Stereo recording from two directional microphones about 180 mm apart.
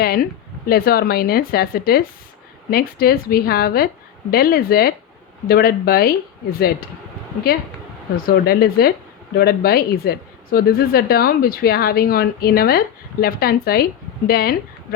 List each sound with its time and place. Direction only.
0.0 s speech: 55° left (ahead or behind)
8.1 s speech: 55° left (ahead or behind)